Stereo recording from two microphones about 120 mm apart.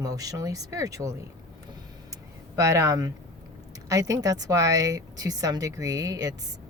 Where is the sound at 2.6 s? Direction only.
25° right (ahead or behind).